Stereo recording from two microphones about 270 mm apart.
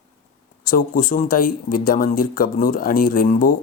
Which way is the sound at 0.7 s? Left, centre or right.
Left.